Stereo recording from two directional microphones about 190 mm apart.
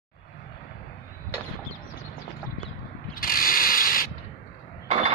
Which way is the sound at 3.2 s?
50° left (ahead or behind).